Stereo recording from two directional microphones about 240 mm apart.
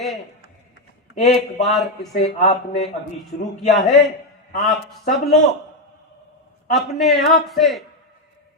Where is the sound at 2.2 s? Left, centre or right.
Left.